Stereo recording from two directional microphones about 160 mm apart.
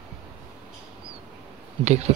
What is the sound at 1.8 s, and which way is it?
Speech, 45° right (ahead or behind).